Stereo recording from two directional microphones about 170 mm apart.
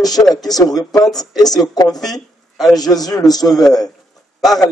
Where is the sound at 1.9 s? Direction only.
Centre (ahead or behind).